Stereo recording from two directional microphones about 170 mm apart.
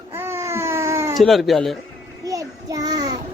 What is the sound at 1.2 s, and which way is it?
Speech, centre (ahead or behind).